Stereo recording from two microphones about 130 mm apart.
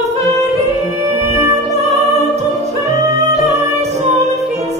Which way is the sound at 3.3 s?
55° right (ahead or behind).